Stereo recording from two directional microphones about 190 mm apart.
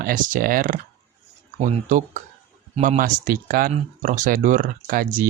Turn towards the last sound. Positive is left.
turn(degrees=-45)  # may be behind; listen again after turning